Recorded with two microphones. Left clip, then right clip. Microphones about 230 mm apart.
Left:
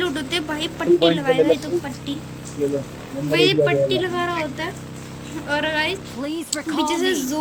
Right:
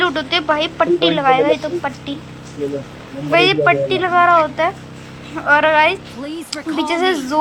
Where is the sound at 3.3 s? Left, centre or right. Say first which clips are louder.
Right 5 dB; centre.